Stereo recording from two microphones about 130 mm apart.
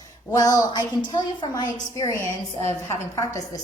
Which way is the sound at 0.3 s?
25° left (ahead or behind).